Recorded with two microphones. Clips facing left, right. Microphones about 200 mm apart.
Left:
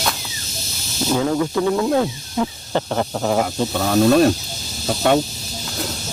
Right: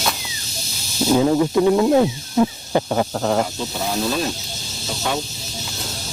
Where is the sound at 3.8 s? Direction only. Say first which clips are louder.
Left 9 dB; 65° left (ahead or behind).